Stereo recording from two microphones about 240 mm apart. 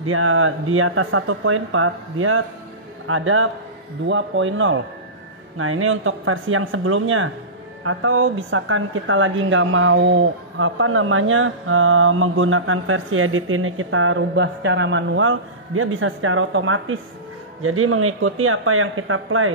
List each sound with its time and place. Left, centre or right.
0.0 s speech: right